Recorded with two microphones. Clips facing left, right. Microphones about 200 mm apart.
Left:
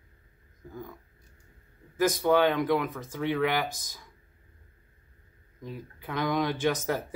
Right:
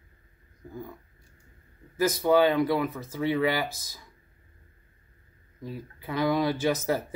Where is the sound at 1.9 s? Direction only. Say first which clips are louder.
Right 1 dB; 10° right (ahead or behind).